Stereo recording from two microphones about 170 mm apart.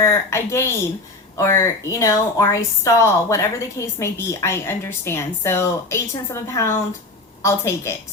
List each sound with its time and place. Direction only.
0.0 s a woman's voice: 15° left (ahead or behind)